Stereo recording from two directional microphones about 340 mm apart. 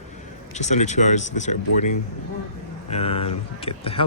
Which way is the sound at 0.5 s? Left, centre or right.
Left.